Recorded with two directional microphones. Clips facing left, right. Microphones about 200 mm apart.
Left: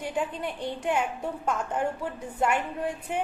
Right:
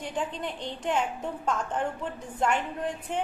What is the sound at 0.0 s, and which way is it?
A woman's voice, 10° left (ahead or behind).